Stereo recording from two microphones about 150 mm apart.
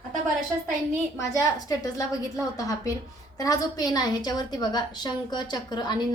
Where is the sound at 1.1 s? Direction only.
25° left (ahead or behind).